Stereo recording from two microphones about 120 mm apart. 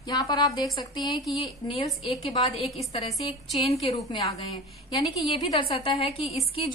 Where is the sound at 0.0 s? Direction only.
35° left (ahead or behind).